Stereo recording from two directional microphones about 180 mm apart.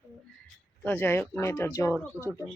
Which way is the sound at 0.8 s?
10° left (ahead or behind).